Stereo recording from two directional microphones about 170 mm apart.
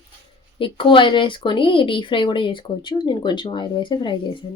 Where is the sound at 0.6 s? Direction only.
30° left (ahead or behind).